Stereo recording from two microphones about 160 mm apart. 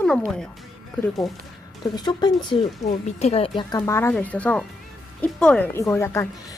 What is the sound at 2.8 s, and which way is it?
Speech, 40° left (ahead or behind).